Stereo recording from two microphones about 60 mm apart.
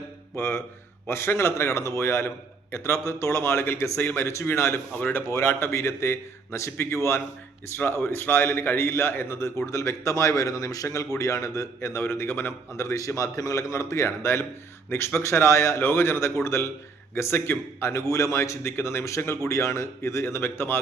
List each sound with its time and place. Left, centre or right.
0.3 s a man's voice: left
9.6 s a man's voice: left
11.2 s a man's voice: left
12.7 s a man's voice: left
18.1 s a man's voice: left
19.5 s a man's voice: left